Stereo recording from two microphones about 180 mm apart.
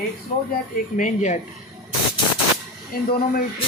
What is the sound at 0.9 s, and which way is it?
Speech, 45° left (ahead or behind).